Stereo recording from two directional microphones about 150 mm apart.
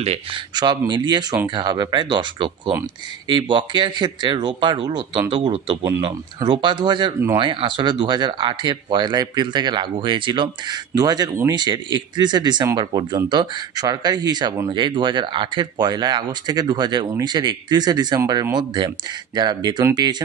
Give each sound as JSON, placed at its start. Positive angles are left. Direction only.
{"t": 0.0, "sound": "speech", "side_deg": -45}
{"t": 0.6, "sound": "speech", "side_deg": -30}